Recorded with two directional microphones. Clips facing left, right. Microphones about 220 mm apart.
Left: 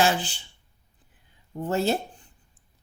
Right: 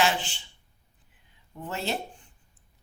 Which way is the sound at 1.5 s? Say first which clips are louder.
Left 8 dB; 40° left (ahead or behind).